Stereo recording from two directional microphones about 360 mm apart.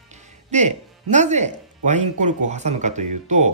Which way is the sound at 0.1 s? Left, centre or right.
Centre.